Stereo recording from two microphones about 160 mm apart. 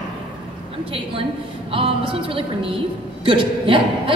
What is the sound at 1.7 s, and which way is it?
A man's voice, 35° right (ahead or behind).